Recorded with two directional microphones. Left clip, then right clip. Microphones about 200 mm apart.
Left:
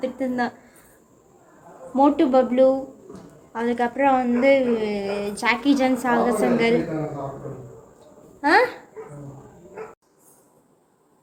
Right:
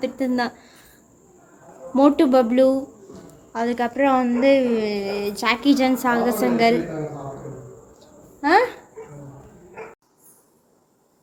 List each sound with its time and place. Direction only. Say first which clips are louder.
0.0 s a woman's voice: right 2 dB; 25° right (ahead or behind)
2.0 s a woman's voice: right 1 dB; 30° right (ahead or behind)
7.9 s a sound: right 1 dB; 20° right (ahead or behind)